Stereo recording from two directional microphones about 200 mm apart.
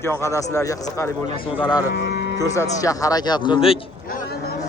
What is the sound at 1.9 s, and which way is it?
Speech, 60° left (ahead or behind).